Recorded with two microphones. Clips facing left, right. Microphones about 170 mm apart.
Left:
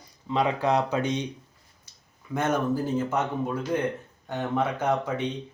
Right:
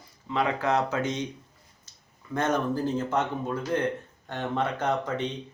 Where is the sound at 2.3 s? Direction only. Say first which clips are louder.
Left 1 dB; 10° left (ahead or behind).